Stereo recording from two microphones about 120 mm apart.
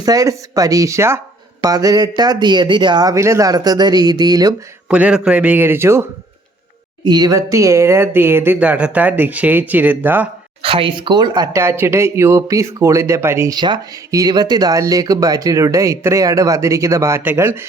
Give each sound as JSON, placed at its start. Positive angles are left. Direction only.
{"t": 0.0, "sound": "speech", "side_deg": -30}
{"t": 4.9, "sound": "speech", "side_deg": -10}
{"t": 7.0, "sound": "speech", "side_deg": -35}
{"t": 10.6, "sound": "speech", "side_deg": -50}
{"t": 13.6, "sound": "speech", "side_deg": -35}